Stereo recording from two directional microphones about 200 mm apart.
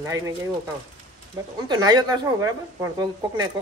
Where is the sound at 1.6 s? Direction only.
20° right (ahead or behind).